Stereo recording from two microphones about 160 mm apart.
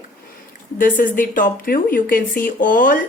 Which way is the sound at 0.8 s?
55° left (ahead or behind).